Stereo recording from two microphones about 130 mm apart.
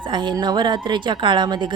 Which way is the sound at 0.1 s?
35° right (ahead or behind).